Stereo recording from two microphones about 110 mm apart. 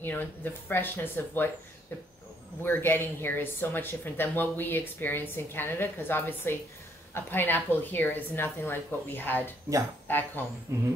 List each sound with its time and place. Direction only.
0.0 s speech: 20° left (ahead or behind)
2.6 s a woman's voice: 20° left (ahead or behind)
10.7 s didgeridoo: 25° right (ahead or behind)